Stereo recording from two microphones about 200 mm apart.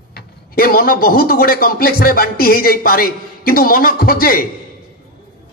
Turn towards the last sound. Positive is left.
turn(degrees=45)  # may be behind; listen again after turning